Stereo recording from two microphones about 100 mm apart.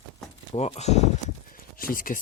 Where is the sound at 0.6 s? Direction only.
90° left.